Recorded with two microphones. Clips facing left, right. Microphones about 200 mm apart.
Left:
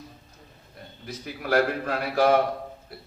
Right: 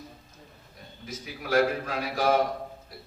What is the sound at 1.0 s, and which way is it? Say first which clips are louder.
A man's voice: left 4 dB; 60° left (ahead or behind).